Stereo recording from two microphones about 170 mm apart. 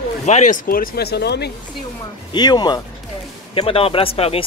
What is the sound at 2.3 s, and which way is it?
Speech, 25° left (ahead or behind).